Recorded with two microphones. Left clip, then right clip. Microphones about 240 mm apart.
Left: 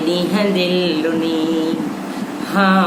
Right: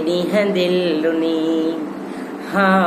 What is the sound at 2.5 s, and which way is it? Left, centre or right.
Music, centre.